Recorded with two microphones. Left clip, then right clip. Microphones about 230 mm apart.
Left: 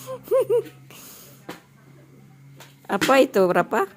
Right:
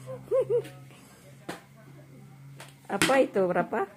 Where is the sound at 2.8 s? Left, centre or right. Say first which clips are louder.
Left 6 dB; left.